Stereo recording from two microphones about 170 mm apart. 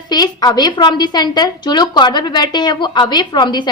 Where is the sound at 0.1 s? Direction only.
25° left (ahead or behind).